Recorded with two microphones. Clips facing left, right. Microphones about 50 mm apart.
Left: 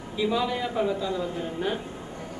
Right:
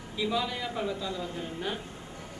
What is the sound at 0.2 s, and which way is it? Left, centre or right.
A man's voice, centre.